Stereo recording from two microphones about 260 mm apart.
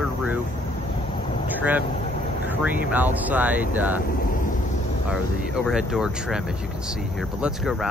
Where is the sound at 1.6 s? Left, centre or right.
Centre.